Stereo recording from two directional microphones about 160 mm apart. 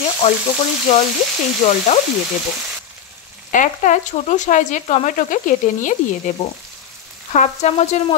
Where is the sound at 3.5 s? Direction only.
55° left (ahead or behind).